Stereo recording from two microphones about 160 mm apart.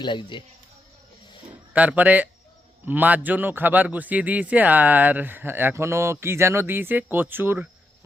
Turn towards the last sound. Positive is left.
turn(degrees=-15)  # may be behind; listen again after turning